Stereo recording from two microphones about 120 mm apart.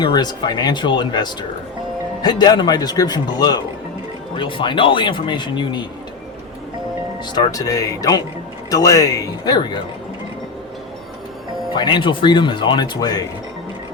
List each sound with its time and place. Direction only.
0.0 s speech: 35° left (ahead or behind)
4.4 s speech: 45° left (ahead or behind)
7.3 s speech: 30° left (ahead or behind)
11.7 s speech: 40° left (ahead or behind)